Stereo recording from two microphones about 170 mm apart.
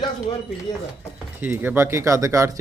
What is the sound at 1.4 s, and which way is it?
Speech, 10° right (ahead or behind).